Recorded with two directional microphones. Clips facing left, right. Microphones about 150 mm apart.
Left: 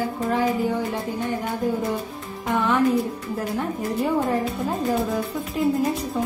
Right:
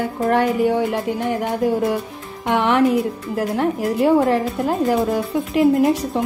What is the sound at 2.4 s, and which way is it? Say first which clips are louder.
A woman's voice: right 4 dB; 75° right (ahead or behind).